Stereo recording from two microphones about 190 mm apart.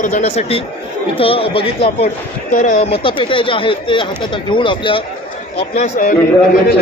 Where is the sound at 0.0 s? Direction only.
40° left (ahead or behind).